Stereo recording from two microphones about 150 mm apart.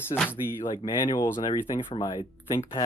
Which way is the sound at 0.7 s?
30° left (ahead or behind).